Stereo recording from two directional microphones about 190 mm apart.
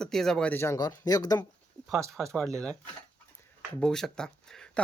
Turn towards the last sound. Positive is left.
turn(degrees=5)  # may be behind; listen again after turning